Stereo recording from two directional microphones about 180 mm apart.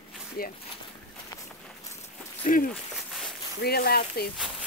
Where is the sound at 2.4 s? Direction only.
50° left (ahead or behind).